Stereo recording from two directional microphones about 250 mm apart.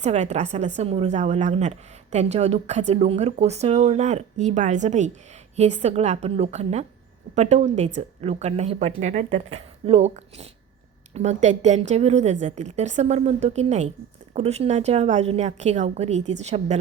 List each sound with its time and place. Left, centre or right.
0.0 s a woman's voice: right